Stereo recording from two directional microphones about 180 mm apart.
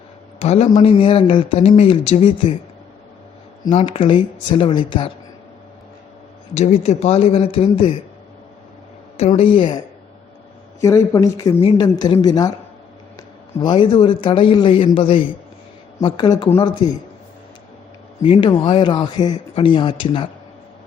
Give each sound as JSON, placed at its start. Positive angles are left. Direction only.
{"t": 0.3, "sound": "speech", "side_deg": 35}
{"t": 3.6, "sound": "speech", "side_deg": 30}
{"t": 6.5, "sound": "speech", "side_deg": 40}
{"t": 9.1, "sound": "speech", "side_deg": 35}
{"t": 10.8, "sound": "speech", "side_deg": 15}
{"t": 13.6, "sound": "speech", "side_deg": 25}
{"t": 18.3, "sound": "speech", "side_deg": 30}